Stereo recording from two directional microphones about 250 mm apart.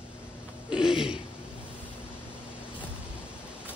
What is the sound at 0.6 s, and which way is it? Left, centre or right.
Speech, centre.